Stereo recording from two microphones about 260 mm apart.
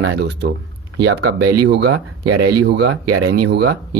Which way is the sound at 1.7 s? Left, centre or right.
Right.